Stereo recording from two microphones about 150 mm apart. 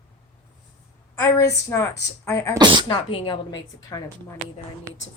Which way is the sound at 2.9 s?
35° left (ahead or behind).